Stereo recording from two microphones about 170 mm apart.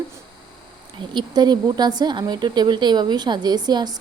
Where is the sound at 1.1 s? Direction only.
25° right (ahead or behind).